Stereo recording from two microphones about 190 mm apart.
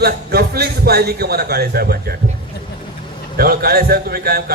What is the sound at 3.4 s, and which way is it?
A man's voice, 55° right (ahead or behind).